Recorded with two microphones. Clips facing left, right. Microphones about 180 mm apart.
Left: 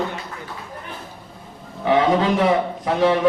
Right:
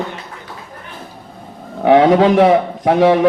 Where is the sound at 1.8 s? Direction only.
90° right.